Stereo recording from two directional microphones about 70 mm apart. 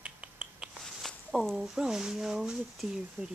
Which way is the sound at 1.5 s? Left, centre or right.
Centre.